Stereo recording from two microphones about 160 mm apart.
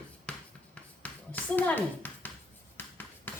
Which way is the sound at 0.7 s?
10° left (ahead or behind).